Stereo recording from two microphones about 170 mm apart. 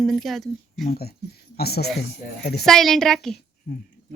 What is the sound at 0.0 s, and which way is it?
Speech, centre (ahead or behind).